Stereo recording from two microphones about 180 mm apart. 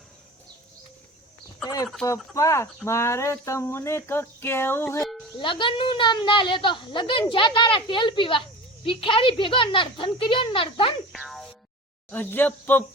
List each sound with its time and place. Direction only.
1.6 s a sound: 20° left (ahead or behind)
2.0 s speech: 15° left (ahead or behind)
5.4 s a woman's voice: 25° left (ahead or behind)
11.1 s boing: centre (ahead or behind)
12.1 s speech: 10° left (ahead or behind)